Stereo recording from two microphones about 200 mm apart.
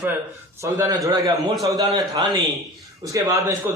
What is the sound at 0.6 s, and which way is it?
A man's voice, 15° right (ahead or behind).